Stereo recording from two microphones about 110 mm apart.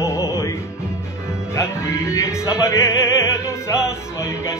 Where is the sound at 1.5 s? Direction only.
25° left (ahead or behind).